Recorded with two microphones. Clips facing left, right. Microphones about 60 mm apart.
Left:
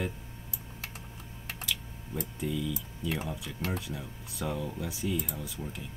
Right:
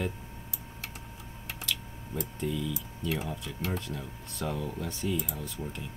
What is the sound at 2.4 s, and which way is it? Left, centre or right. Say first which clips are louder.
Speech: even; centre.